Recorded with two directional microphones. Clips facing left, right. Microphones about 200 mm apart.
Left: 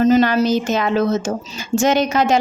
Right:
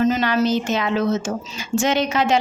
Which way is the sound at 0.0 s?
40° left (ahead or behind).